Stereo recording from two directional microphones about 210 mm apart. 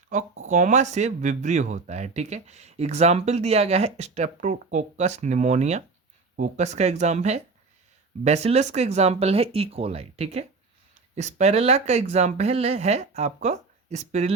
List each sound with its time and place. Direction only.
0.1 s speech: 35° right (ahead or behind)